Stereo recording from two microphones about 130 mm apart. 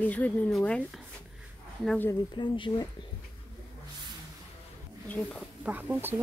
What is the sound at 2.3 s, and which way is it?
Speech, 35° left (ahead or behind).